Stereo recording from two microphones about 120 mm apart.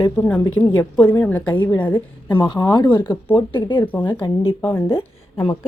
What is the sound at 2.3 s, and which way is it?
A woman's voice, 45° left (ahead or behind).